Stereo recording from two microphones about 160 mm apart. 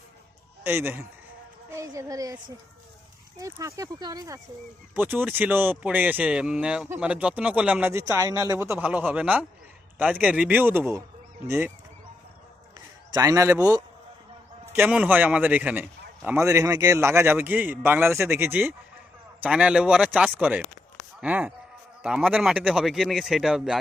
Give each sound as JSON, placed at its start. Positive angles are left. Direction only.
{"t": 0.6, "sound": "a man's voice", "side_deg": -15}
{"t": 4.9, "sound": "speech", "side_deg": -10}
{"t": 13.1, "sound": "speech", "side_deg": -20}
{"t": 14.8, "sound": "speech", "side_deg": -10}